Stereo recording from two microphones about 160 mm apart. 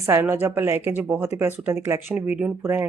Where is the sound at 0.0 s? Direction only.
15° right (ahead or behind).